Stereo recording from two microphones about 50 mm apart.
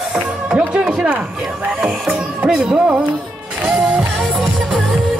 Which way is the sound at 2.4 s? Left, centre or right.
Centre.